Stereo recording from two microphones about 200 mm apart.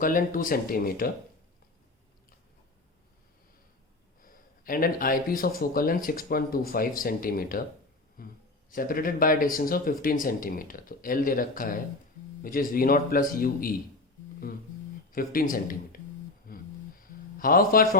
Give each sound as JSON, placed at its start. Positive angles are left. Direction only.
{"t": 0.0, "sound": "speech", "side_deg": 45}
{"t": 4.2, "sound": "speech", "side_deg": 45}
{"t": 15.1, "sound": "speech", "side_deg": 45}
{"t": 16.5, "sound": "a sound", "side_deg": 45}